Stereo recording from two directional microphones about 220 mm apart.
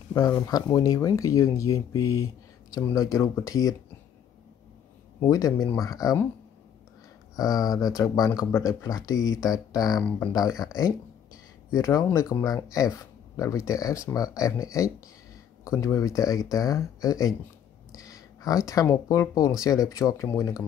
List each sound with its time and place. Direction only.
0.1 s speech: 15° left (ahead or behind)
5.2 s speech: 15° left (ahead or behind)
7.3 s speech: 15° left (ahead or behind)
11.7 s speech: 15° left (ahead or behind)